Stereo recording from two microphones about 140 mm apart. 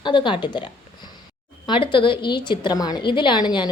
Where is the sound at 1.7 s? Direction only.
35° left (ahead or behind).